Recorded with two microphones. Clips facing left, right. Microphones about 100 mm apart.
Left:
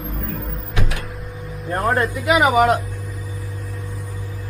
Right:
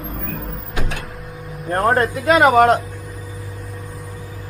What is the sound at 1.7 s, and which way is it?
Speech, 35° right (ahead or behind).